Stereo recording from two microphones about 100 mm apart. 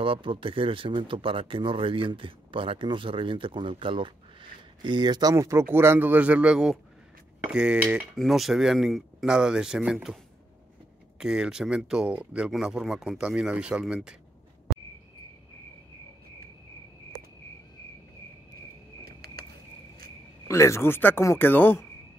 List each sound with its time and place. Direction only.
0.0 s speech: 60° right (ahead or behind)
5.3 s speech: 30° right (ahead or behind); by 8.0 s 10° right (ahead or behind)
8.2 s speech: centre (ahead or behind)
11.1 s speech: 5° right (ahead or behind)
20.4 s speech: 30° left (ahead or behind)